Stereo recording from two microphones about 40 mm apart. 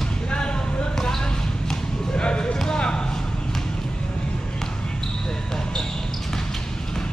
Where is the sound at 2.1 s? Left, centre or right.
Left.